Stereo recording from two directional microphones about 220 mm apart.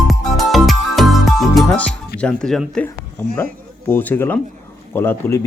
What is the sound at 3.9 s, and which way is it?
Speech, 10° left (ahead or behind).